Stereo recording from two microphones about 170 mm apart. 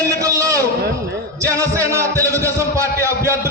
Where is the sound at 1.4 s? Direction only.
20° right (ahead or behind).